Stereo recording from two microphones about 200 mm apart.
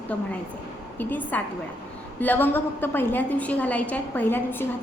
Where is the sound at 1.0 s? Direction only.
10° left (ahead or behind).